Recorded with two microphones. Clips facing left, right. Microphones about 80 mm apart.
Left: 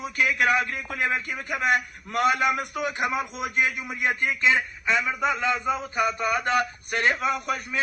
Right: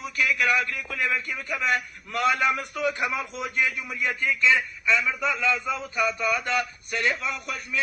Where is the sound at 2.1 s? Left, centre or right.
Centre.